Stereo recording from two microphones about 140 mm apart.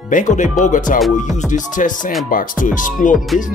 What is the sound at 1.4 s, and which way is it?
Speech, 65° left (ahead or behind).